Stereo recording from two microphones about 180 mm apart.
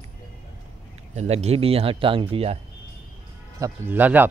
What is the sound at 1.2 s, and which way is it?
Speech, 35° right (ahead or behind).